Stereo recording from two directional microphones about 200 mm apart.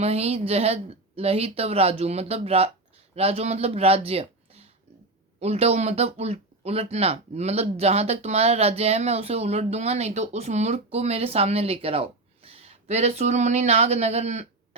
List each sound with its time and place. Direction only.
0.0 s speech: 30° right (ahead or behind)